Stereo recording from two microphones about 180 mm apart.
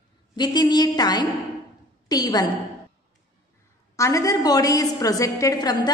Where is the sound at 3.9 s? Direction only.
15° left (ahead or behind).